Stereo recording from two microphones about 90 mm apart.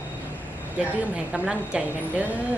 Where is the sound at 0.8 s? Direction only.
15° right (ahead or behind).